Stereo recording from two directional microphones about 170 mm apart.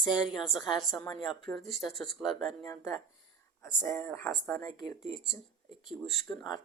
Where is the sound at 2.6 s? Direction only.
20° left (ahead or behind).